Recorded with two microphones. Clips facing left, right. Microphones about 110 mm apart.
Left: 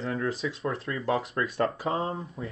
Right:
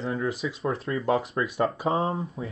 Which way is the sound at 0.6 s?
30° right (ahead or behind).